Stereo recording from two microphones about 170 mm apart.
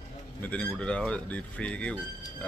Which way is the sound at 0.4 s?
10° left (ahead or behind).